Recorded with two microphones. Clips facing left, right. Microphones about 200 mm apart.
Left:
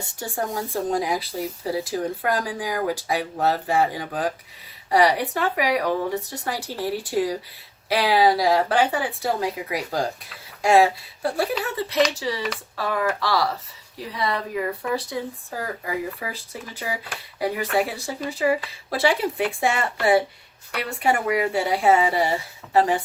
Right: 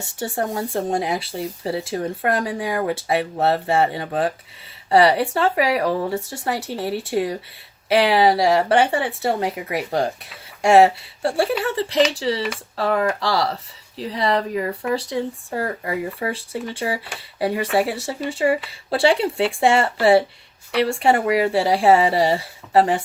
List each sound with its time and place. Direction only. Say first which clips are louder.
0.2 s speech: right 4 dB; 25° right (ahead or behind)